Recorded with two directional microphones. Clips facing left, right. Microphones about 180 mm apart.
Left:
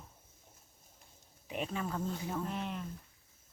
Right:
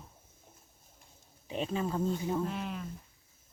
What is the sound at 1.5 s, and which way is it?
Speech, 30° right (ahead or behind).